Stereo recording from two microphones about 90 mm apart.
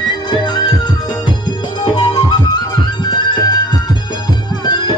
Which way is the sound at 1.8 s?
55° left (ahead or behind).